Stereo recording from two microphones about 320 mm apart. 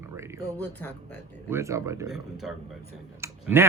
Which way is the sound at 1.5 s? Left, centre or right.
Centre.